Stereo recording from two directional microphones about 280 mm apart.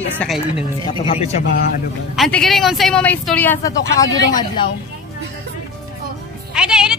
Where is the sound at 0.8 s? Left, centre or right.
Centre.